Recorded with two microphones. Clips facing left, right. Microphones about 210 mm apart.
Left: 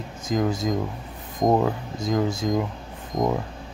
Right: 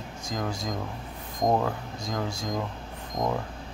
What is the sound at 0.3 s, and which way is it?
Speech, 20° left (ahead or behind).